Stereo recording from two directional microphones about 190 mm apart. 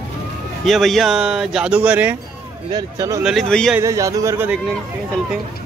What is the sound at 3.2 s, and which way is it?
Speech, 5° left (ahead or behind).